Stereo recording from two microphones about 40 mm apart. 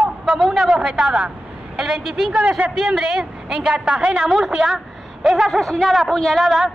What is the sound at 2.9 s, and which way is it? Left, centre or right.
Speech, centre.